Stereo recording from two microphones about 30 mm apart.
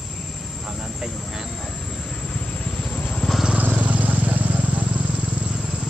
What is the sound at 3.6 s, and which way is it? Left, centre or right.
Vehicle, right.